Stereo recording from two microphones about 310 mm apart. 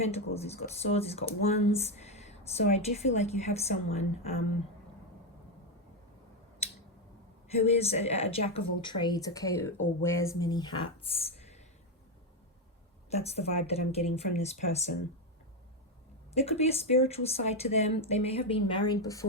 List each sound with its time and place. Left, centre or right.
0.0 s speech: centre
7.5 s speech: centre
13.1 s speech: centre
16.3 s speech: centre